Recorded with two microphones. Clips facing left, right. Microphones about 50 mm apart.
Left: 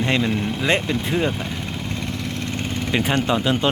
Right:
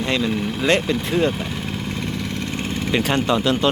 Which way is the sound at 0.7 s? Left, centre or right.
Centre.